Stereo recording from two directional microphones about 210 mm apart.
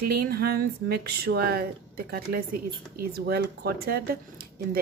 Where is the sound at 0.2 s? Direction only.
50° right (ahead or behind).